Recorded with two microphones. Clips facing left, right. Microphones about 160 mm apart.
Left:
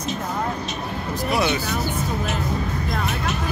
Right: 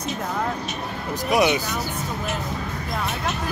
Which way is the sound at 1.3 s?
15° right (ahead or behind).